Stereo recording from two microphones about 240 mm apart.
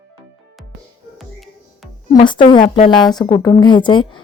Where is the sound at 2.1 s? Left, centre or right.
Left.